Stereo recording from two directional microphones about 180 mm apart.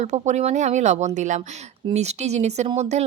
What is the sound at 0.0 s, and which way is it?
A woman's voice, 40° right (ahead or behind).